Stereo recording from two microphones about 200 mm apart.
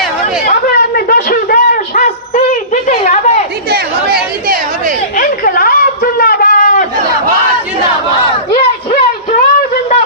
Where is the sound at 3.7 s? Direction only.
50° right (ahead or behind).